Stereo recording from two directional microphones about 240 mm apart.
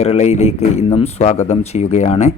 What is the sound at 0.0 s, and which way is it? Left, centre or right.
Speech, left.